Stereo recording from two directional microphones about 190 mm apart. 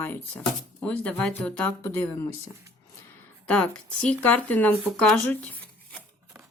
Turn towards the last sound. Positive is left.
turn(degrees=5)  # may be behind; listen again after turning